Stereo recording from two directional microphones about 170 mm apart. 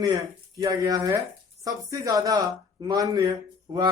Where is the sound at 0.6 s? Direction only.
20° right (ahead or behind).